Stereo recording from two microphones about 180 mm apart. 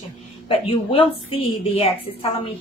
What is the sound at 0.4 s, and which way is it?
A woman's voice, 30° left (ahead or behind).